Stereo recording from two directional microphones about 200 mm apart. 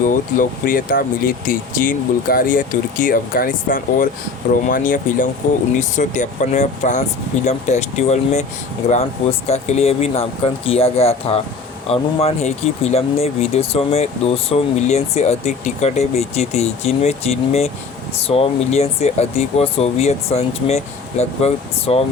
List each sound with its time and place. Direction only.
0.0 s speech: 40° left (ahead or behind)
9.5 s speech: 35° left (ahead or behind)